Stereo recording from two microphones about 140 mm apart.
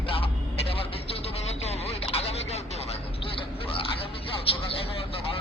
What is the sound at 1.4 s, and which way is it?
Vehicle, 50° left (ahead or behind).